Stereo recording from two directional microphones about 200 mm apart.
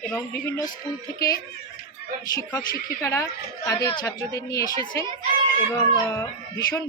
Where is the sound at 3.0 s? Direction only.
15° left (ahead or behind).